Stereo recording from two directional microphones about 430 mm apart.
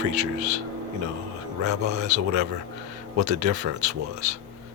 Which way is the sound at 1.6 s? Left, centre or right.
Right.